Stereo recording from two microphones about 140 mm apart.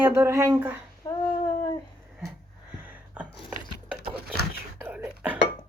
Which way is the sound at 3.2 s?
10° right (ahead or behind).